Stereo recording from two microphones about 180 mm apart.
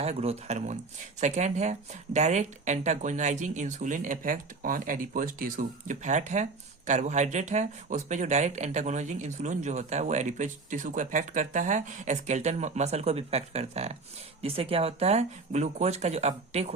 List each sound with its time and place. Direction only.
0.0 s speech: 35° right (ahead or behind)